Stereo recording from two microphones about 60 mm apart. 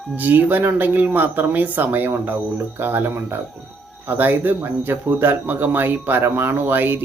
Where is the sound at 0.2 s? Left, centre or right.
Right.